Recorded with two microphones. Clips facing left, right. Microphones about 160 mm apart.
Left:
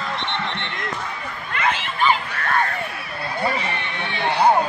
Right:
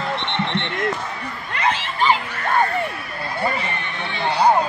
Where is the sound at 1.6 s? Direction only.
30° right (ahead or behind).